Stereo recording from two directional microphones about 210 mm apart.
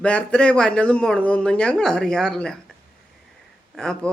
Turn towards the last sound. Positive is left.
turn(degrees=5)  # may be behind; listen again after turning